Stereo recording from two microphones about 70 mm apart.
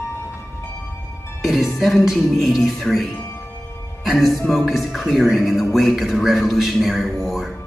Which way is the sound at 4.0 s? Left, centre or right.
Centre.